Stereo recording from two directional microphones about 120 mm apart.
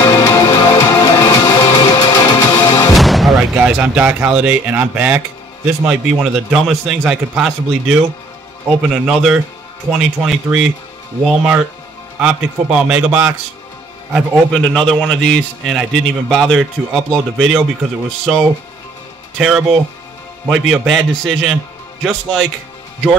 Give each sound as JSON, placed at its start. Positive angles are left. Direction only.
{"t": 0.0, "sound": "music", "side_deg": 30}
{"t": 2.9, "sound": "music", "side_deg": 0}
{"t": 3.3, "sound": "a man's voice", "side_deg": -10}
{"t": 14.5, "sound": "a man's voice", "side_deg": 5}